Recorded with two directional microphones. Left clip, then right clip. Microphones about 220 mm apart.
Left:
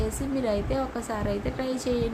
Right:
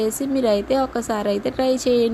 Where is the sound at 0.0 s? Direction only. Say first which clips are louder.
Right 8 dB; 30° right (ahead or behind).